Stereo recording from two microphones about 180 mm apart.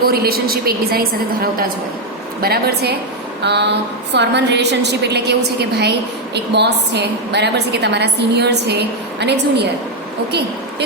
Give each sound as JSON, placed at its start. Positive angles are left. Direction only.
{"t": 0.0, "sound": "a woman's voice", "side_deg": -55}
{"t": 3.4, "sound": "a woman's voice", "side_deg": -70}